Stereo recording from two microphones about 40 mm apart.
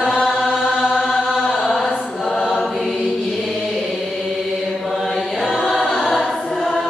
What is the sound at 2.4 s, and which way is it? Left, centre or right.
Choir, centre.